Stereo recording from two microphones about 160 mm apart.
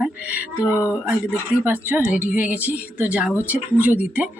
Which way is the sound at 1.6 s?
10° right (ahead or behind).